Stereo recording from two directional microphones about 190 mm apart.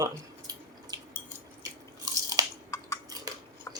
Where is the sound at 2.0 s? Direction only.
20° right (ahead or behind).